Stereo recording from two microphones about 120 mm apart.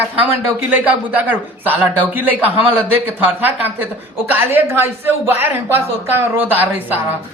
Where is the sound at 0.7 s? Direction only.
15° right (ahead or behind).